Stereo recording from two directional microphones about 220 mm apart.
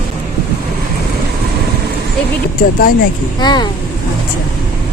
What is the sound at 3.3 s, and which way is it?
Speech, 20° left (ahead or behind).